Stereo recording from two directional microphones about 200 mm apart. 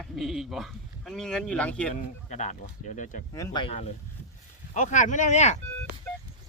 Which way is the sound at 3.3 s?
20° left (ahead or behind).